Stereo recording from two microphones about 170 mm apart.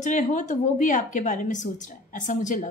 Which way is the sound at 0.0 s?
45° left (ahead or behind).